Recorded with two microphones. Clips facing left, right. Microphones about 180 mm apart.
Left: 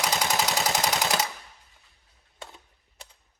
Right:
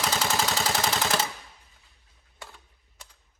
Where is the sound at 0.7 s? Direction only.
15° left (ahead or behind).